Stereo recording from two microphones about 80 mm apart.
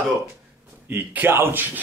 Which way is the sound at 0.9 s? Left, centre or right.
Right.